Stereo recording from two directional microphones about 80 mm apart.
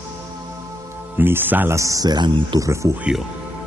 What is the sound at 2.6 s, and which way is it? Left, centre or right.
Speech, right.